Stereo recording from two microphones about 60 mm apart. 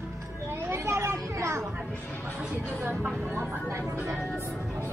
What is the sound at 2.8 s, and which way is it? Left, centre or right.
Speech, right.